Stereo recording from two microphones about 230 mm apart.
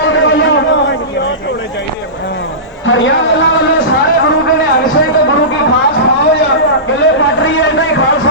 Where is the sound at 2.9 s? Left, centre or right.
Left.